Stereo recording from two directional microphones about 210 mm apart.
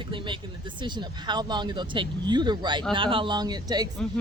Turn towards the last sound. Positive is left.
turn(degrees=-20)  # may be behind; listen again after turning